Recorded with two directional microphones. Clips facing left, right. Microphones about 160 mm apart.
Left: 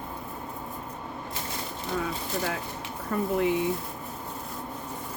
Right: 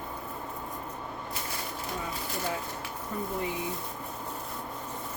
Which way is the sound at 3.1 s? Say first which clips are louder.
Left 7 dB; 80° left.